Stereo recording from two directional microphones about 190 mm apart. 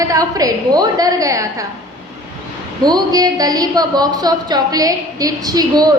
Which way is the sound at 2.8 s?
20° right (ahead or behind).